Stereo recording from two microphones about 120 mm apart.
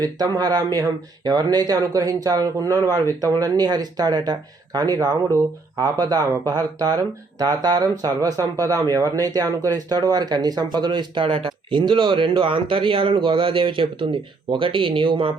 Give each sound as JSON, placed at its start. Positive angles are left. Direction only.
{"t": 0.0, "sound": "speech", "side_deg": -30}